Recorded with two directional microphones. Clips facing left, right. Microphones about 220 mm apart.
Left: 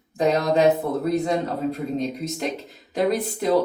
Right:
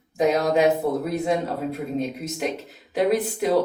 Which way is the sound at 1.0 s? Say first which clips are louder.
Left 1 dB; 5° right (ahead or behind).